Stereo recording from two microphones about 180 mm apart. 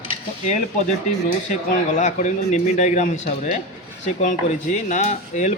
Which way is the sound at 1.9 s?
40° left (ahead or behind).